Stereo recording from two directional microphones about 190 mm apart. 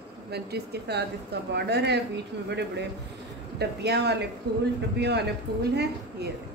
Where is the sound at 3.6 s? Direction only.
60° right (ahead or behind).